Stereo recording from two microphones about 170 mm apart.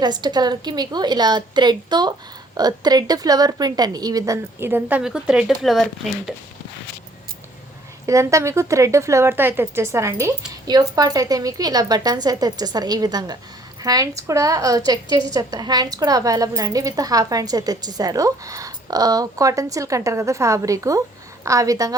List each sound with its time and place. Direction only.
0.0 s a woman's voice: 25° right (ahead or behind); by 6.3 s centre (ahead or behind)
8.0 s a woman's voice: 20° right (ahead or behind)